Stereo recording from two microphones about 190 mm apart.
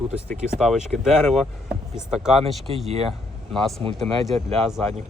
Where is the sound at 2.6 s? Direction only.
30° right (ahead or behind).